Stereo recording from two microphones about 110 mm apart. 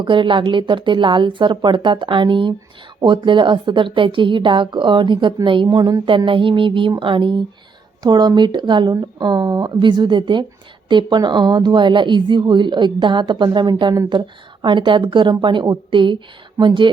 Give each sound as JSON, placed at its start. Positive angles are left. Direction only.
{"t": 0.0, "sound": "a woman's voice", "side_deg": -50}